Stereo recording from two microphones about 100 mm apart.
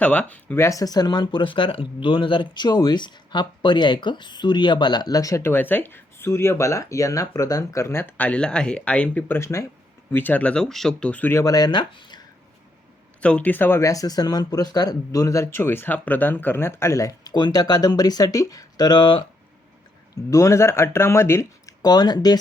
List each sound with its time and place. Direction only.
0.0 s speech: 15° left (ahead or behind)
9.4 s speech: 30° left (ahead or behind)
10.1 s speech: 20° left (ahead or behind)
11.4 s speech: 40° left (ahead or behind)
13.2 s speech: 15° left (ahead or behind); by 19.2 s 50° left (ahead or behind)
20.3 s speech: 30° left (ahead or behind)